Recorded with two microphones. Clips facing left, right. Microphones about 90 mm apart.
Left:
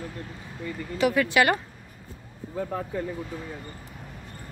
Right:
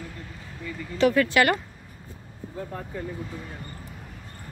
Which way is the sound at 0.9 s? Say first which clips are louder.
Right 2 dB; 15° left (ahead or behind).